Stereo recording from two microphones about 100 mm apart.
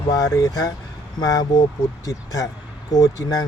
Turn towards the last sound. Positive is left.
turn(degrees=40)  # may be behind; listen again after turning